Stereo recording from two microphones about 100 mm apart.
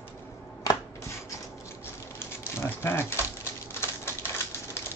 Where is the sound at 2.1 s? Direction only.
25° left (ahead or behind).